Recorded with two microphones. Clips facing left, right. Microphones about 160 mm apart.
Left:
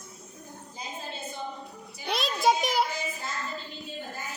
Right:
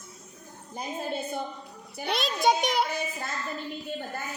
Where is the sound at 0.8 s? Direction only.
55° right (ahead or behind).